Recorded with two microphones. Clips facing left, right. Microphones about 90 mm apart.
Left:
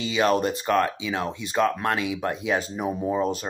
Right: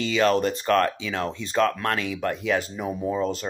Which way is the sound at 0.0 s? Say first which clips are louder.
Right 1 dB; 15° left (ahead or behind).